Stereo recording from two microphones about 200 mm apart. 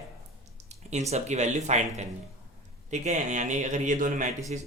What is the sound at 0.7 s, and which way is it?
A man's voice, 35° right (ahead or behind).